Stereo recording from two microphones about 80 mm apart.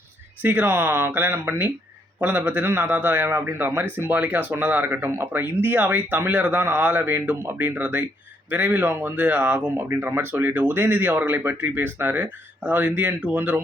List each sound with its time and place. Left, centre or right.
0.4 s a man's voice: right
9.7 s a man's voice: right